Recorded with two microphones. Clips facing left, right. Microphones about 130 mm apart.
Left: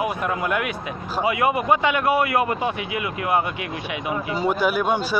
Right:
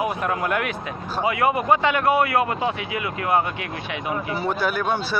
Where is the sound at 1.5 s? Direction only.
10° left (ahead or behind).